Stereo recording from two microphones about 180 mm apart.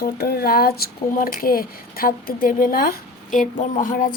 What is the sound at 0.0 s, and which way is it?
A woman's voice, 60° left (ahead or behind).